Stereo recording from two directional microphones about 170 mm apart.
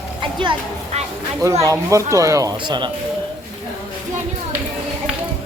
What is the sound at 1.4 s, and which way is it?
Speech, 20° right (ahead or behind).